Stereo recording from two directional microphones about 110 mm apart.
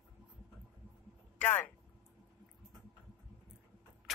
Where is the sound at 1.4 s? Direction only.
15° left (ahead or behind).